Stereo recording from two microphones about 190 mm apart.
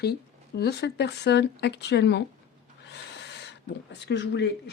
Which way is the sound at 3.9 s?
65° left (ahead or behind).